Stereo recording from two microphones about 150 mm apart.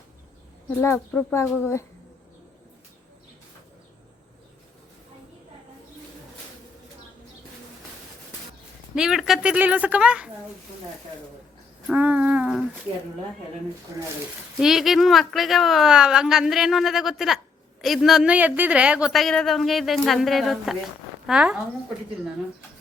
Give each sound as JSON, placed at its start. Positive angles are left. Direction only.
{"t": 0.8, "sound": "speech", "side_deg": 10}
{"t": 9.0, "sound": "a woman's voice", "side_deg": -5}
{"t": 11.9, "sound": "speech", "side_deg": -10}
{"t": 14.6, "sound": "speech", "side_deg": 0}